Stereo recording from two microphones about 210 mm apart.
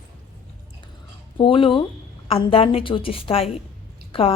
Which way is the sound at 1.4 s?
25° left (ahead or behind).